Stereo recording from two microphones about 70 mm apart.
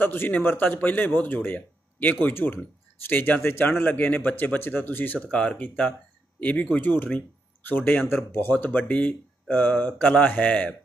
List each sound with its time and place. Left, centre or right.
0.0 s speech: left
5.3 s speech: centre; by 8.5 s left
8.5 s speech: left